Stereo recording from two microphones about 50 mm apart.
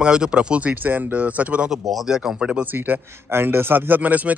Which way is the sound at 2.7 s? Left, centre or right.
Right.